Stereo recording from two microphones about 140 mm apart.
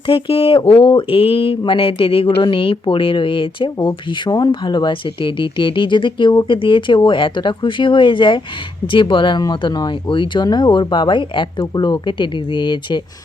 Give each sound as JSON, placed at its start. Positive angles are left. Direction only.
{"t": 0.1, "sound": "speech", "side_deg": 40}